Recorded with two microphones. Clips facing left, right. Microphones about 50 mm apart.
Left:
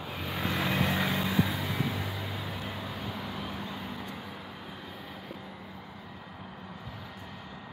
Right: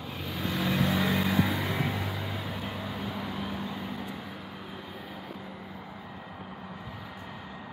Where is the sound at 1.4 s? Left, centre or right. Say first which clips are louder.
Right 2 dB; centre.